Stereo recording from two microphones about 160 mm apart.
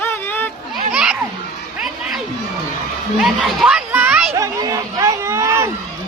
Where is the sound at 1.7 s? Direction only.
5° right (ahead or behind).